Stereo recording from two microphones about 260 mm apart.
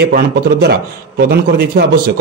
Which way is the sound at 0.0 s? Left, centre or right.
Right.